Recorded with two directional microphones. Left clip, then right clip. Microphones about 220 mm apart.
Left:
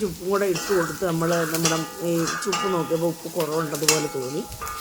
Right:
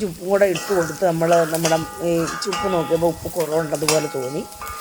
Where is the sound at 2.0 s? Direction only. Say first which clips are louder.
Right 4 dB; 5° right (ahead or behind).